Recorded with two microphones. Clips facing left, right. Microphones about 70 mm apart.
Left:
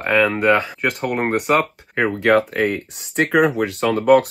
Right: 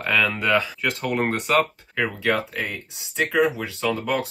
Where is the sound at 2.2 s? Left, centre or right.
Left.